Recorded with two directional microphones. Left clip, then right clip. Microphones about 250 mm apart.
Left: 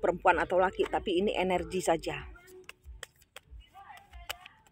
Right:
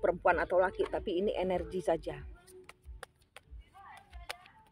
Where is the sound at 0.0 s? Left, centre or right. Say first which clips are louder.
Left 3 dB; left.